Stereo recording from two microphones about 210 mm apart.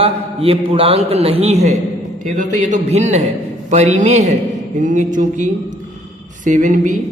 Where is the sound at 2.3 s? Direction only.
35° right (ahead or behind).